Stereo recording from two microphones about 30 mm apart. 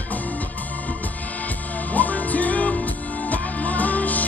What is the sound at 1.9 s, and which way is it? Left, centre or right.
Music, left.